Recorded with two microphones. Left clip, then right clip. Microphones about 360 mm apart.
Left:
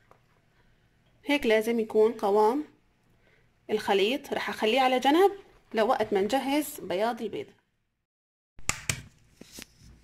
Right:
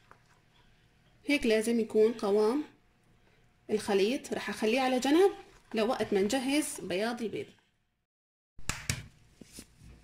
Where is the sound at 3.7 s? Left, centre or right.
Left.